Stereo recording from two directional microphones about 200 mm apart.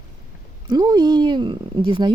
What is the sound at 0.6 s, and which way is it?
Speech, 20° right (ahead or behind).